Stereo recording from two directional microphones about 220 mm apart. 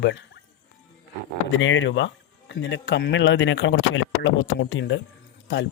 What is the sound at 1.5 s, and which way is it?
Speech, 60° left (ahead or behind).